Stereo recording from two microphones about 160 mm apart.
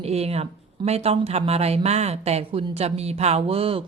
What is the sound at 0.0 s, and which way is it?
Speech, 40° right (ahead or behind).